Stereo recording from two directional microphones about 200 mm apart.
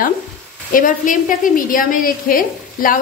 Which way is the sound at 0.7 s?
40° left (ahead or behind).